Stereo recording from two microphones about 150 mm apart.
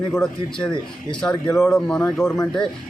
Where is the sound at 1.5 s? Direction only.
20° left (ahead or behind).